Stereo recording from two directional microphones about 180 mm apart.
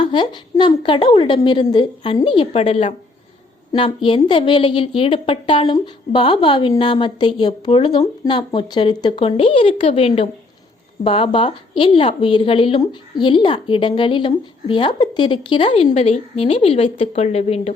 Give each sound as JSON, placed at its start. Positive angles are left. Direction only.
{"t": 0.0, "sound": "a woman's voice", "side_deg": 25}